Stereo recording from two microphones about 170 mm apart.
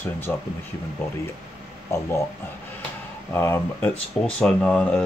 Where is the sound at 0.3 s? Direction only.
10° left (ahead or behind).